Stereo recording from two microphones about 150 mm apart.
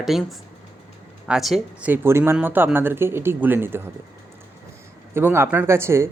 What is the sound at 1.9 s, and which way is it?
A woman's voice, 15° right (ahead or behind).